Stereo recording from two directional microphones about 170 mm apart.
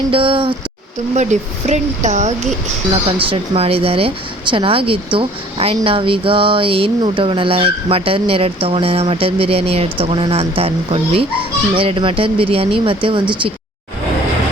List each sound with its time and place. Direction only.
0.1 s speech: 30° right (ahead or behind)
1.1 s speech: 45° right (ahead or behind)
2.9 s speech: 30° right (ahead or behind)